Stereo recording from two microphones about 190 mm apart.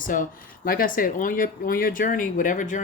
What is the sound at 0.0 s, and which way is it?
Speech, 45° left (ahead or behind).